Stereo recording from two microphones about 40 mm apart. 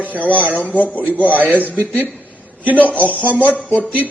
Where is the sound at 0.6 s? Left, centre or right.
Left.